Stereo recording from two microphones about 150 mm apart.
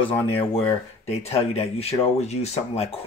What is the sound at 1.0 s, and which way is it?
Speech, 45° left (ahead or behind).